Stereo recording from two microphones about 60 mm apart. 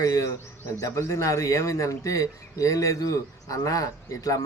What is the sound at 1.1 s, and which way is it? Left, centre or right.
Speech, left.